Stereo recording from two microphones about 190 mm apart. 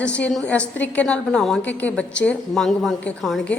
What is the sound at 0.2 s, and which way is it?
A woman's voice, 5° left (ahead or behind).